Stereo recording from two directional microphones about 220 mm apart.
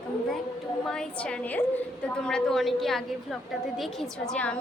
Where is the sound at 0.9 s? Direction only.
5° left (ahead or behind).